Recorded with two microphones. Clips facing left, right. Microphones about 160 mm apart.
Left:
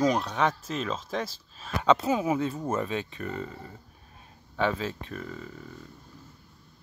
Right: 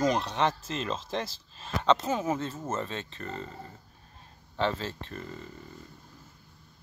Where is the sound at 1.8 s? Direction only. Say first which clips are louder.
Left 3 dB; 10° left (ahead or behind).